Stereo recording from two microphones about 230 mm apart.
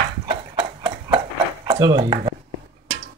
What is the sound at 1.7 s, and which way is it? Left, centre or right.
Speech, right.